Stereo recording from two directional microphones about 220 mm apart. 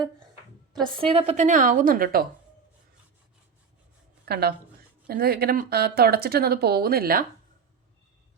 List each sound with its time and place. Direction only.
0.7 s a woman's voice: 20° right (ahead or behind); by 2.2 s 40° right (ahead or behind)
4.3 s speech: 45° right (ahead or behind)